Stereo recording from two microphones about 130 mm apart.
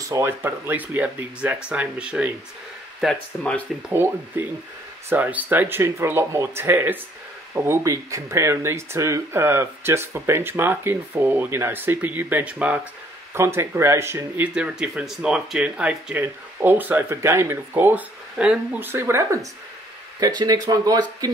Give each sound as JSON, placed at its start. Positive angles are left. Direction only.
{"t": 0.0, "sound": "speech", "side_deg": -20}
{"t": 3.0, "sound": "speech", "side_deg": 0}
{"t": 3.9, "sound": "speech", "side_deg": -15}
{"t": 20.2, "sound": "speech", "side_deg": -30}